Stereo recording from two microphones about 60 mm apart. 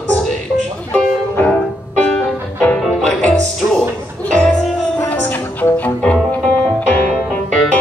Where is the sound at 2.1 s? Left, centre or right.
Centre.